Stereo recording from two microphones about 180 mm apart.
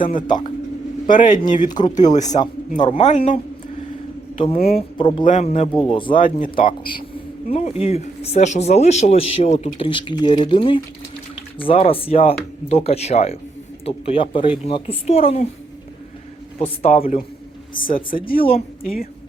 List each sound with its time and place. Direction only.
0.0 s speech: 50° left (ahead or behind)
0.3 s speech: 25° left (ahead or behind)
1.0 s speech: 45° left (ahead or behind)
4.4 s speech: 45° left (ahead or behind)
4.9 s speech: 25° left (ahead or behind)
5.2 s speech: 40° left (ahead or behind)
6.1 s speech: 50° left (ahead or behind)
7.5 s speech: 35° left (ahead or behind)
16.8 s speech: 35° left (ahead or behind)
17.9 s speech: 55° left (ahead or behind)